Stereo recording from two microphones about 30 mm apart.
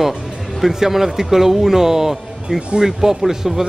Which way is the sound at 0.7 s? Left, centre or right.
Centre.